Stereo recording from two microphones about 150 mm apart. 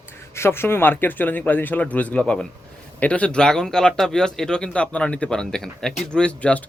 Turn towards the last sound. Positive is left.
turn(degrees=10)  # may be behind; listen again after turning